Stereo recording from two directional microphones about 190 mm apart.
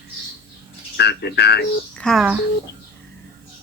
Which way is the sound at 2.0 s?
Centre (ahead or behind).